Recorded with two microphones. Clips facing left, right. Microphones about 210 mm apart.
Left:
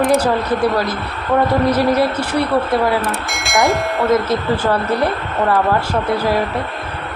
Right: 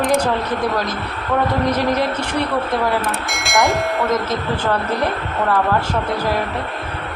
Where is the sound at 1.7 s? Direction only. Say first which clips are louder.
Left 4 dB; 10° left (ahead or behind).